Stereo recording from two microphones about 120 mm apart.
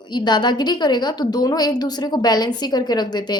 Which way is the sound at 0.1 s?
40° left (ahead or behind).